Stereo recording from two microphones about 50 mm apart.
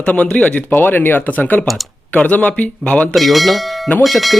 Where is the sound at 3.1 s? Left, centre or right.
Centre.